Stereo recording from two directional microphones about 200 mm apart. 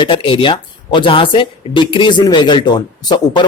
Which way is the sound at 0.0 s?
25° left (ahead or behind).